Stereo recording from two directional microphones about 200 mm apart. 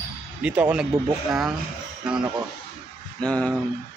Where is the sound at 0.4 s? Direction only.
5° right (ahead or behind).